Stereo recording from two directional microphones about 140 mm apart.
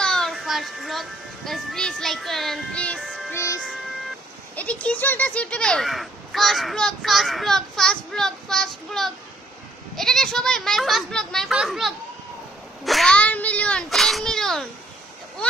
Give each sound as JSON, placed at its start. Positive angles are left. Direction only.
{"t": 0.0, "sound": "a child's voice", "side_deg": 5}
{"t": 3.0, "sound": "music", "side_deg": 0}
{"t": 3.3, "sound": "music", "side_deg": 20}
{"t": 4.6, "sound": "speech", "side_deg": 10}